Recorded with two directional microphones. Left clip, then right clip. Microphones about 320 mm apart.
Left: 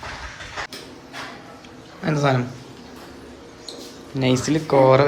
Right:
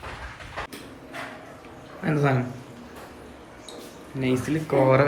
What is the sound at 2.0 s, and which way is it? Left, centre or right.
Speech, centre.